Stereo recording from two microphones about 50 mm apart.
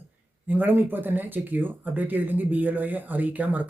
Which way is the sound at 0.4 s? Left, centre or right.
Right.